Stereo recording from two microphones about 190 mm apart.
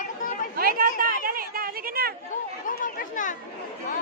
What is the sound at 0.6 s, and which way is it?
Speech, 50° right (ahead or behind).